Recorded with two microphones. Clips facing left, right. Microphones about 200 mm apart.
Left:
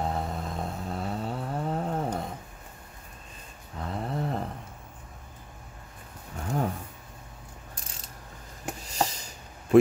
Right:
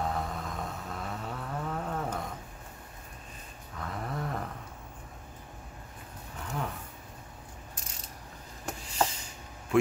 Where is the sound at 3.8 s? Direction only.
30° left (ahead or behind).